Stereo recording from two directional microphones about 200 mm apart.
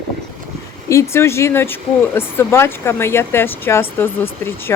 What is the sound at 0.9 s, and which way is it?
Speech, 15° left (ahead or behind).